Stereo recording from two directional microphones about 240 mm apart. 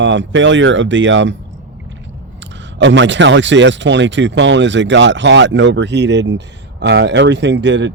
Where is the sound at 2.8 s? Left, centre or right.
Right.